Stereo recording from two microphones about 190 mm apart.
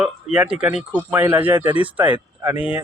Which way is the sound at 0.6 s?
5° right (ahead or behind).